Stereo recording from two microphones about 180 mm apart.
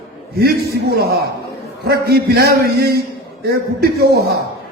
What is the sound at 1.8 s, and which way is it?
Speech, 65° right (ahead or behind).